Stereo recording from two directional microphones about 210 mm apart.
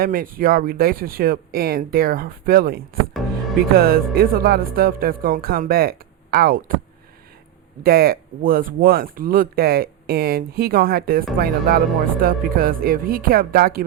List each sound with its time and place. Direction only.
0.0 s speech: 40° right (ahead or behind)
7.9 s speech: 45° right (ahead or behind)